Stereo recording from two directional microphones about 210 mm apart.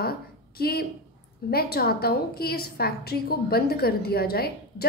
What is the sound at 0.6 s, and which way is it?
A woman's voice, 45° left (ahead or behind).